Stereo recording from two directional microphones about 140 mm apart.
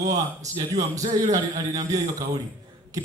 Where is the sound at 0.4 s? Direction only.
25° right (ahead or behind).